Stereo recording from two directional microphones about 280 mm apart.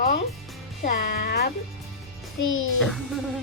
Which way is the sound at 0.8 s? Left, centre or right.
Left.